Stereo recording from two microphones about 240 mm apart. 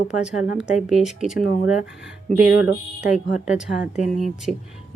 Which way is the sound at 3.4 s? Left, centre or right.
Centre.